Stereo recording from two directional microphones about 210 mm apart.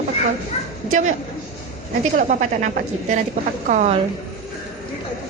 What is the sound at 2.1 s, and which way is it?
A woman's voice, 35° right (ahead or behind).